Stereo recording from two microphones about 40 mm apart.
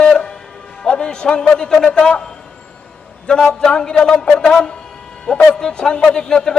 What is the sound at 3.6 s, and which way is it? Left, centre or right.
A man's voice, left.